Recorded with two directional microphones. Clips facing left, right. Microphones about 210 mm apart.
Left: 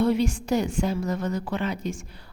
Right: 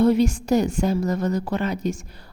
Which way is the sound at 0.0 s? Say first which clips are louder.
Right 5 dB; 40° right (ahead or behind).